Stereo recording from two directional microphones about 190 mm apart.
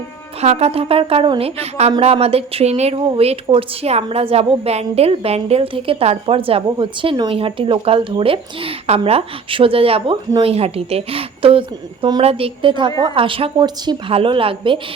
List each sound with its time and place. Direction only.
0.4 s a woman's voice: 35° right (ahead or behind)